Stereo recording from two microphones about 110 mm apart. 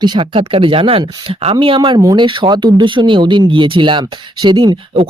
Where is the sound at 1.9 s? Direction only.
40° right (ahead or behind).